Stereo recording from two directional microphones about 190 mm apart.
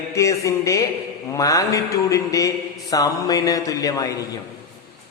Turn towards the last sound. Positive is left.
turn(degrees=20)  # may be behind; listen again after turning